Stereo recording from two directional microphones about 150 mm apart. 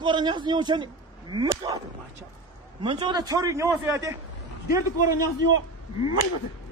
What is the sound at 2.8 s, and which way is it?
A man's voice, 30° right (ahead or behind).